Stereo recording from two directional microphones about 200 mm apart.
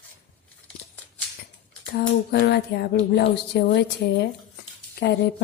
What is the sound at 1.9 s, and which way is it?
Speech, 50° left (ahead or behind).